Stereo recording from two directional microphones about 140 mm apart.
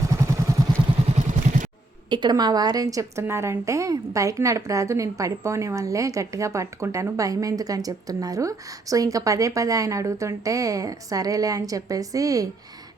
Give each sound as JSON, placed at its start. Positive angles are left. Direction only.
{"t": 0.1, "sound": "vehicle", "side_deg": -25}
{"t": 1.0, "sound": "vehicle", "side_deg": -55}
{"t": 2.0, "sound": "a woman's voice", "side_deg": -30}